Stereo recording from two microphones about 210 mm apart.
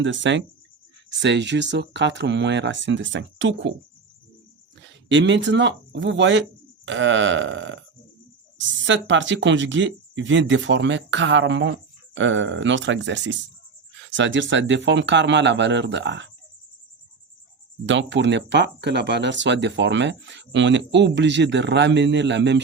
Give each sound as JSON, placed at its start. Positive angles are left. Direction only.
{"t": 0.0, "sound": "speech", "side_deg": -60}
{"t": 4.8, "sound": "speech", "side_deg": -60}
{"t": 17.8, "sound": "speech", "side_deg": -60}